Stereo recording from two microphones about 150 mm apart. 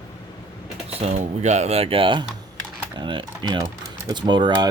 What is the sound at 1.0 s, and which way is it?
Speech, 45° right (ahead or behind).